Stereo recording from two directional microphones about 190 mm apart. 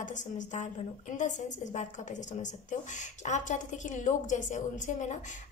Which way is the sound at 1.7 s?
40° left (ahead or behind).